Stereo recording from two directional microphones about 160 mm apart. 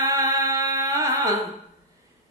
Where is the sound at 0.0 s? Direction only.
20° right (ahead or behind).